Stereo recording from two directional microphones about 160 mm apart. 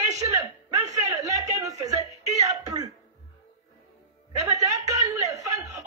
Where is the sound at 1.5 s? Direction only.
20° right (ahead or behind).